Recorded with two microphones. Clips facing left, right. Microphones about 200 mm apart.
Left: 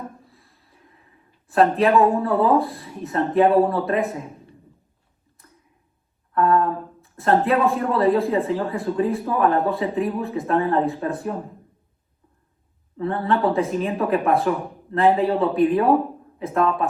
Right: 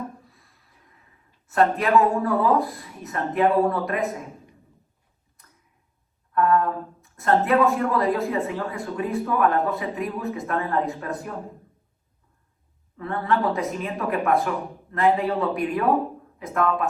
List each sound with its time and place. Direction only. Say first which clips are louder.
0.3 s a sound: left 3 dB; 30° left (ahead or behind)
1.5 s speech: left 4 dB; 30° left (ahead or behind)
6.3 s speech: left 2 dB; 30° left (ahead or behind)
13.0 s speech: left 3 dB; 30° left (ahead or behind)